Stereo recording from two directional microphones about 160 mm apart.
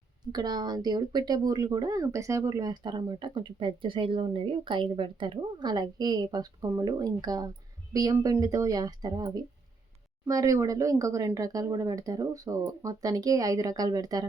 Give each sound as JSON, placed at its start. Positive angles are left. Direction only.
{"t": 0.3, "sound": "speech", "side_deg": -25}